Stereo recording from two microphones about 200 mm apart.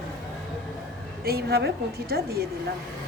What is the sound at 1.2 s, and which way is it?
Speech, 50° right (ahead or behind).